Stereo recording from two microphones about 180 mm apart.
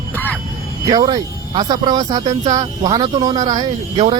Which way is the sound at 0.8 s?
20° right (ahead or behind).